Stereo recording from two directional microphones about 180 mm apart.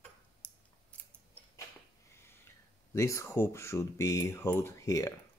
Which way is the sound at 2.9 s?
15° left (ahead or behind).